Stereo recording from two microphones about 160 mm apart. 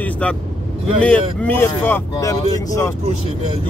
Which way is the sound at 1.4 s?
15° left (ahead or behind).